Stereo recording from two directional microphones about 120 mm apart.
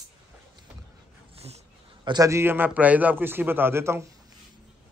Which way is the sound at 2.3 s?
20° right (ahead or behind).